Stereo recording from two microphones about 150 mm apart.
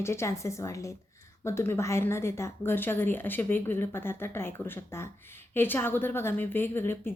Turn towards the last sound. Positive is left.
turn(degrees=15)  # may be behind; listen again after turning